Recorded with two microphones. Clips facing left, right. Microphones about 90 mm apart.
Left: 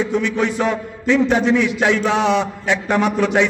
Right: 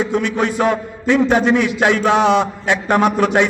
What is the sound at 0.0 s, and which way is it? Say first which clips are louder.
A man's voice: right 1 dB; 55° right (ahead or behind).